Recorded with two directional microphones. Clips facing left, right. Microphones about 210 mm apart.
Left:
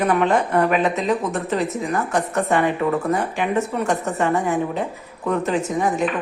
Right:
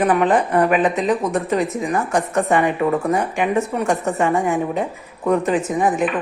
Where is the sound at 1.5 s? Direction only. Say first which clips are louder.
Right 2 dB; 15° right (ahead or behind).